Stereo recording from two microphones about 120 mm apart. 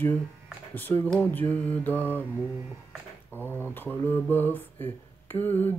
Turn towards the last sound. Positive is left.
turn(degrees=15)  # may be behind; listen again after turning